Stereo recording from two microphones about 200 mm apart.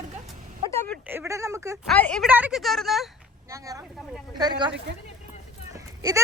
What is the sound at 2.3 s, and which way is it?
Speech, 5° right (ahead or behind).